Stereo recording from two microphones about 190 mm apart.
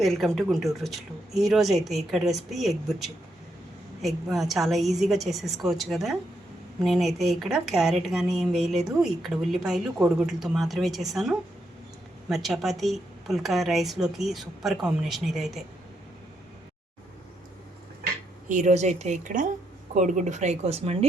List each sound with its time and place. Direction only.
0.0 s a woman's voice: centre (ahead or behind)
18.4 s speech: 40° right (ahead or behind)